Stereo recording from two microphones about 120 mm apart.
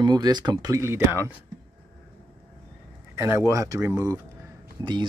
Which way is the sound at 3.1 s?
20° right (ahead or behind).